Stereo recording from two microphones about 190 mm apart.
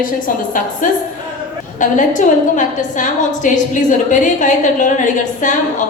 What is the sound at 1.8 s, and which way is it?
A woman's voice, 40° left (ahead or behind).